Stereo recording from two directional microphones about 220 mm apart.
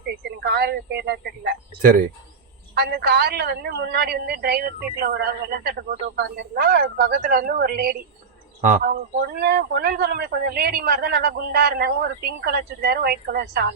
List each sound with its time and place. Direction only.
0.3 s a man's voice: 45° right (ahead or behind)